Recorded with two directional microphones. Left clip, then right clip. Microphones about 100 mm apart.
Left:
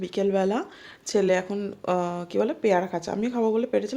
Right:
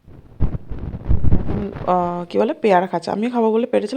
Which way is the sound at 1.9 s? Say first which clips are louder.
Right 8 dB; 30° right (ahead or behind).